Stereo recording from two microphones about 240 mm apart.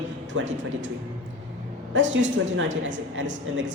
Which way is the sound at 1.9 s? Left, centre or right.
Right.